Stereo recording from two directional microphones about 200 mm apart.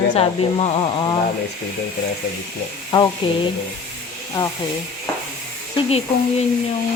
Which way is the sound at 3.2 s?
25° left (ahead or behind).